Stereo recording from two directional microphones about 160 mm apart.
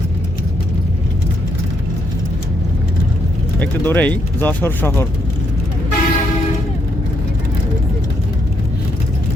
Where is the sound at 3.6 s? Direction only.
10° left (ahead or behind).